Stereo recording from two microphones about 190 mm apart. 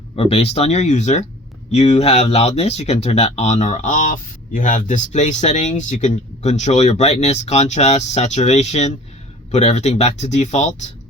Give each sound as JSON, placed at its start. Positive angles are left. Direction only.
{"t": 0.2, "sound": "speech", "side_deg": 30}